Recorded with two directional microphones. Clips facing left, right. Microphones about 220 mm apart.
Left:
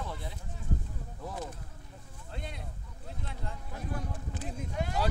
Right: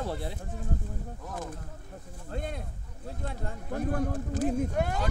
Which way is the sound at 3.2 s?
55° right (ahead or behind).